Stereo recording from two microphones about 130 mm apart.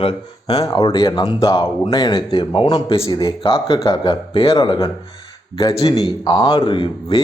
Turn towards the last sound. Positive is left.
turn(degrees=40)  # may be behind; listen again after turning